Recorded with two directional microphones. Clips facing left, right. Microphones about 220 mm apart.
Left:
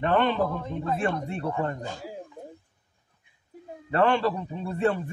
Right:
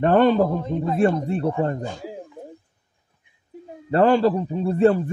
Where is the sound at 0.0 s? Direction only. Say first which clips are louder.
Right 7 dB; 40° right (ahead or behind).